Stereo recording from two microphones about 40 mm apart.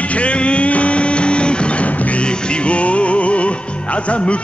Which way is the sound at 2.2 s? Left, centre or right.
Left.